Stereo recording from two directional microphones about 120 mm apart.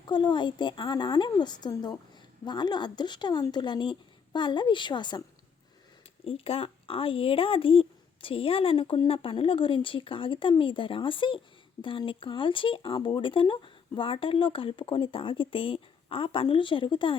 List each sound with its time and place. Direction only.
0.1 s a woman's voice: 40° left (ahead or behind)
6.2 s speech: 50° left (ahead or behind)